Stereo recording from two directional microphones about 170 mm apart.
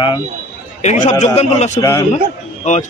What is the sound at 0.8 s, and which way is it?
A man's voice, 40° left (ahead or behind).